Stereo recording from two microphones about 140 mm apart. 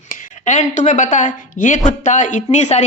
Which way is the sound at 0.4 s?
60° left (ahead or behind).